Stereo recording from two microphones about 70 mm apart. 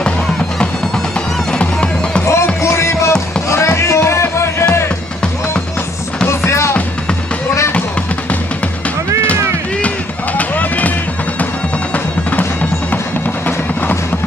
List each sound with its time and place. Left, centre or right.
1.5 s music: centre
2.2 s music: left
6.2 s music: left
9.8 s run: left
11.9 s bagpipes: left